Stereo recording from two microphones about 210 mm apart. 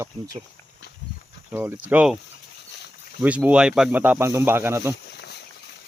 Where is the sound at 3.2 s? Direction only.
5° right (ahead or behind).